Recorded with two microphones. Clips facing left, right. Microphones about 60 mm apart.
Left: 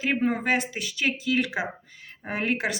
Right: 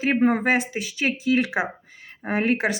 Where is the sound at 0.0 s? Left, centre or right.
Right.